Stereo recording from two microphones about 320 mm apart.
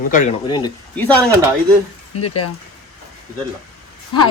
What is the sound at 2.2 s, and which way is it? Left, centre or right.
Speech, left.